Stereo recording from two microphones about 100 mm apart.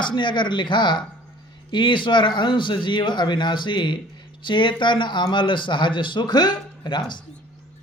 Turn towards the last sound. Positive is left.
turn(degrees=45)  # may be behind; listen again after turning